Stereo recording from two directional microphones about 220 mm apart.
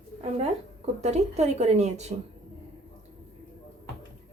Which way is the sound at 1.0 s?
30° right (ahead or behind).